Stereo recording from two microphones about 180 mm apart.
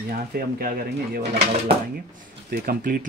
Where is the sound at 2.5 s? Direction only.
55° right (ahead or behind).